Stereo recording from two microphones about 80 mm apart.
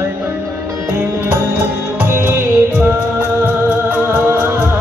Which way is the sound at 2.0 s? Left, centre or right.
Right.